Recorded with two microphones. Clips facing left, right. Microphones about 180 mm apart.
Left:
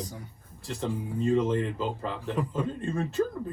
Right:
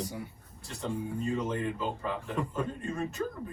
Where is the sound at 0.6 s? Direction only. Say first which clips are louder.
Left 3 dB; 30° left (ahead or behind).